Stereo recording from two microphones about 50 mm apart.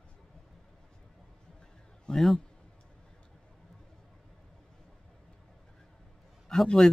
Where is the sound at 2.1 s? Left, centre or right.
Centre.